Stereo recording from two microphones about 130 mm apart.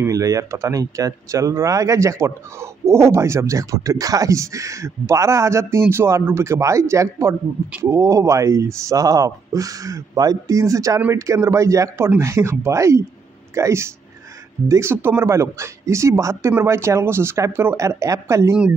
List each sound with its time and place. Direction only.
0.0 s speech: 25° right (ahead or behind)